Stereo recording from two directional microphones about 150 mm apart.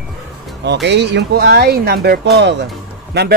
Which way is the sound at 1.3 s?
90° right.